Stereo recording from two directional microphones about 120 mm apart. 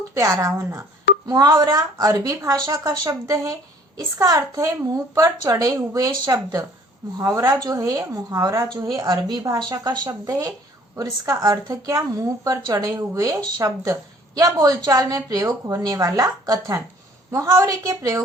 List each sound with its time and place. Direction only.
0.1 s a woman's voice: 25° right (ahead or behind)